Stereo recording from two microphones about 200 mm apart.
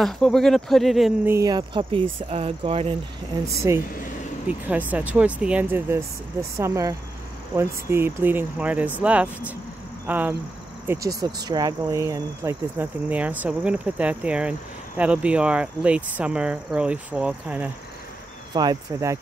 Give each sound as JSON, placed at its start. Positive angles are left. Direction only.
{"t": 0.0, "sound": "speech", "side_deg": 0}
{"t": 1.3, "sound": "speech", "side_deg": -20}
{"t": 3.7, "sound": "speech", "side_deg": -15}
{"t": 18.5, "sound": "speech", "side_deg": -20}